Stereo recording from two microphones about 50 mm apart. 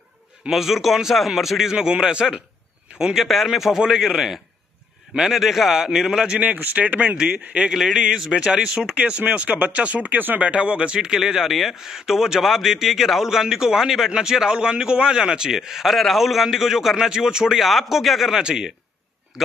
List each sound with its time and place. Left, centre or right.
0.5 s a man's voice: centre
1.7 s speech: centre
3.2 s a man's voice: centre
6.4 s speech: right
7.7 s speech: centre; by 10.4 s right
10.4 s speech: right
11.1 s speech: centre